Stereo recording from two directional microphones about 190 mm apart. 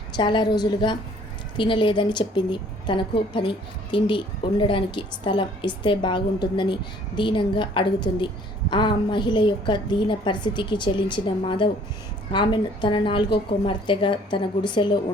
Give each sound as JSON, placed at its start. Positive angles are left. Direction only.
{"t": 0.2, "sound": "a woman's voice", "side_deg": 25}